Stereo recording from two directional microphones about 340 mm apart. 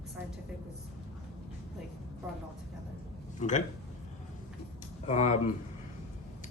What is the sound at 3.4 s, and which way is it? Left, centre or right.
Speech, left.